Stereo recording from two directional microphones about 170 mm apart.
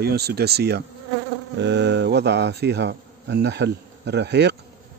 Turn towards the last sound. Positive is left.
turn(degrees=-80)